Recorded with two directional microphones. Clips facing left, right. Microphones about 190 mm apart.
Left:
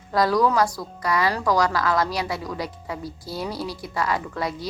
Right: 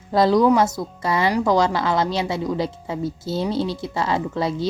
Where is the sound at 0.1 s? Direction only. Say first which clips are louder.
Right 4 dB; 25° right (ahead or behind).